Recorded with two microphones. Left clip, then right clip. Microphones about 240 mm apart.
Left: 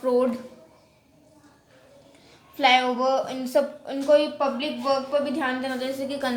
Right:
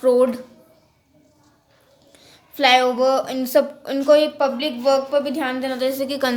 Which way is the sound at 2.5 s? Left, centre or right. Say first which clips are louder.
Right 4 dB; right.